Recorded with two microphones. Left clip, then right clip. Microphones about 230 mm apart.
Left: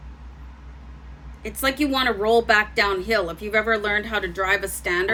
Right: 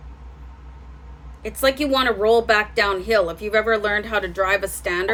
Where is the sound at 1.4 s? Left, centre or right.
Centre.